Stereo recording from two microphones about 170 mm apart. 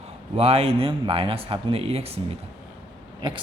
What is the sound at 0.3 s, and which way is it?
A woman's voice, 35° right (ahead or behind).